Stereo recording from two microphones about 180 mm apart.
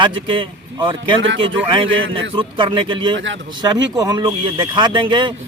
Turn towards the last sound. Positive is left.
turn(degrees=-25)  # may be behind; listen again after turning